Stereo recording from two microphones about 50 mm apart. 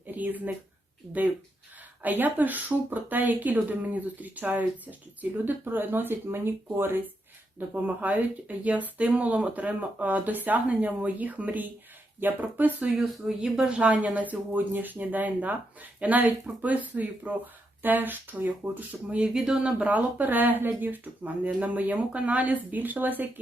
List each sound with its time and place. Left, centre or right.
0.1 s speech: right
2.0 s speech: right
7.7 s speech: right
13.2 s speech: centre
13.7 s speech: right
19.5 s speech: centre
19.8 s speech: right